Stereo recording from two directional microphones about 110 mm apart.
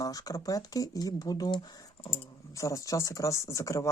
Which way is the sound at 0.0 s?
35° left (ahead or behind).